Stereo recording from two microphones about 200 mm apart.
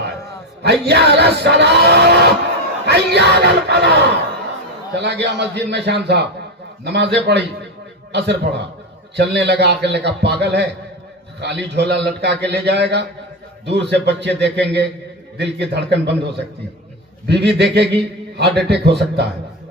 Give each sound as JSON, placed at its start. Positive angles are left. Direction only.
{"t": 0.6, "sound": "a man's voice", "side_deg": -55}
{"t": 4.9, "sound": "a man's voice", "side_deg": -60}